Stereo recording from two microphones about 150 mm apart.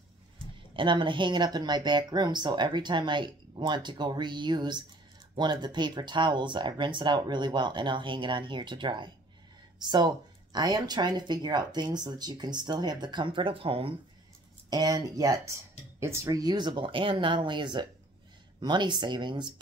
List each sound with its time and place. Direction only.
0.7 s speech: 35° right (ahead or behind)
14.7 s speech: 25° right (ahead or behind)